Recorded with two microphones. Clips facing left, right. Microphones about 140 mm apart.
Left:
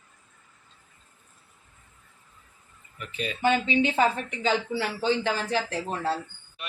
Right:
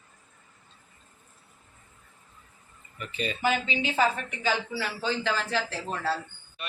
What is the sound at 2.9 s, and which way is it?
Speech, centre (ahead or behind).